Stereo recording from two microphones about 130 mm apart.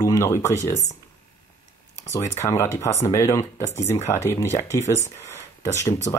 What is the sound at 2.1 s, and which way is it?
Speech, 25° left (ahead or behind).